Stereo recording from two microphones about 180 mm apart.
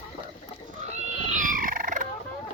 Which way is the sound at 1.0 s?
45° right (ahead or behind).